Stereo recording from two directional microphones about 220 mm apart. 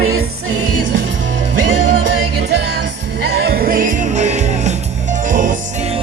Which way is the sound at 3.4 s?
45° right (ahead or behind).